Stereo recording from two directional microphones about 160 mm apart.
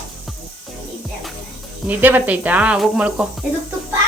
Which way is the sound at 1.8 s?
10° right (ahead or behind).